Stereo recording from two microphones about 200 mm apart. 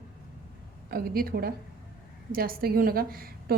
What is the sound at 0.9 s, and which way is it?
A woman's voice, 50° right (ahead or behind).